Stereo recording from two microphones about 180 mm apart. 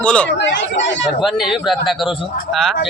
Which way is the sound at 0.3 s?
80° left.